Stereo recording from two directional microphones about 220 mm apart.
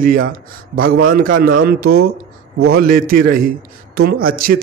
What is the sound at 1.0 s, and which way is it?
Speech, 40° right (ahead or behind).